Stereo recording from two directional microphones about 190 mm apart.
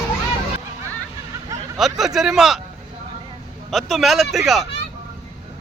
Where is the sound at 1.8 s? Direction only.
Centre (ahead or behind).